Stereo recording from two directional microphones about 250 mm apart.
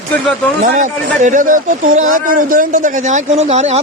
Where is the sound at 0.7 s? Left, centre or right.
Right.